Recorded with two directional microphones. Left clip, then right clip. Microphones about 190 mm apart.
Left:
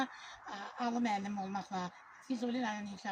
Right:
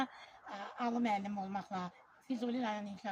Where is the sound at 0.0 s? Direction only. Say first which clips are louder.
Left 1 dB; 25° right (ahead or behind).